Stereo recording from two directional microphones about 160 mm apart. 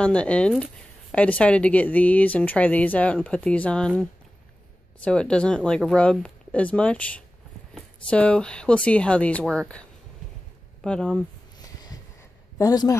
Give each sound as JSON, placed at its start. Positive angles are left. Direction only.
{"t": 0.0, "sound": "speech", "side_deg": 5}
{"t": 5.0, "sound": "speech", "side_deg": 5}
{"t": 11.5, "sound": "a sound", "side_deg": 25}